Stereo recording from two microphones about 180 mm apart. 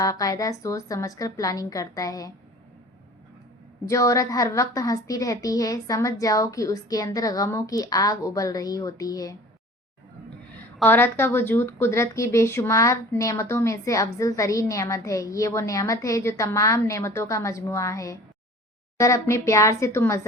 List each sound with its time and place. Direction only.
0.0 s a woman's voice: 20° left (ahead or behind)
3.8 s a woman's voice: 15° left (ahead or behind)
10.8 s a woman's voice: 10° left (ahead or behind)